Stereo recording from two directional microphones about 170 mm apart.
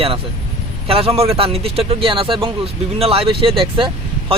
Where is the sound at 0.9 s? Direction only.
35° right (ahead or behind).